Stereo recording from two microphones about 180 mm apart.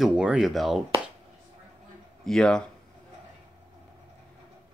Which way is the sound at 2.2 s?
5° left (ahead or behind).